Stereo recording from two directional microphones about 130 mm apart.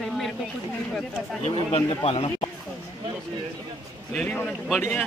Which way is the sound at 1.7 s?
50° left (ahead or behind).